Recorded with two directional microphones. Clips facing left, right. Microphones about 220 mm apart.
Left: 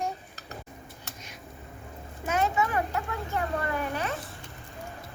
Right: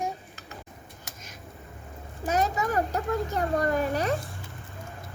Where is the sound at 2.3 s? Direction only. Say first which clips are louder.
Right 1 dB; 40° right (ahead or behind).